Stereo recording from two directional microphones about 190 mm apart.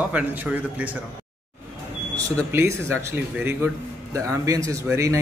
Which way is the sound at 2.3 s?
10° right (ahead or behind).